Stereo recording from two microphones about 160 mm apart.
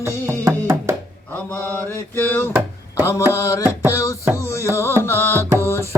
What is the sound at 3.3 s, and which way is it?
Carnatic music, 20° left (ahead or behind).